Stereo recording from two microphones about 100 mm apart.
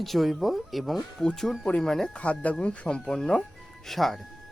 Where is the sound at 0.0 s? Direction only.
Centre (ahead or behind).